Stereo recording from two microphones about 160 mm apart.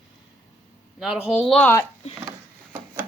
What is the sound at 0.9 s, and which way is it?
Speech, centre (ahead or behind).